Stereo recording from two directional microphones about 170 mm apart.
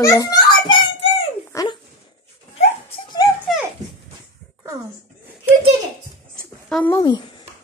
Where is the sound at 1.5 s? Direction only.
15° left (ahead or behind).